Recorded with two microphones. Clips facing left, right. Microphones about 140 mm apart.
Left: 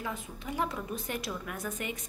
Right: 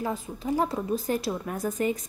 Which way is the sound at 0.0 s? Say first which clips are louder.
Right 7 dB; 35° right (ahead or behind).